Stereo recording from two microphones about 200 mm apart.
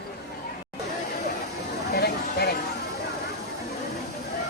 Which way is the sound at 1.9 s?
55° left (ahead or behind).